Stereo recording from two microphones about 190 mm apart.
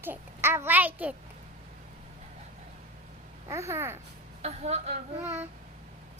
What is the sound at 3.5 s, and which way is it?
Speech, 15° right (ahead or behind).